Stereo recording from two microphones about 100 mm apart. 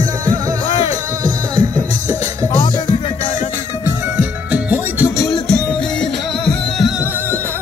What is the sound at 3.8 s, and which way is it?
Music, 15° right (ahead or behind).